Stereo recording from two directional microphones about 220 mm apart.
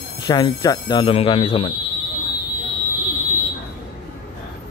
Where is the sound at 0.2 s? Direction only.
20° left (ahead or behind).